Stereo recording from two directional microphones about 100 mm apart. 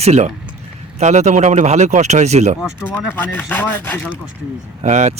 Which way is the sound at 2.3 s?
90° right.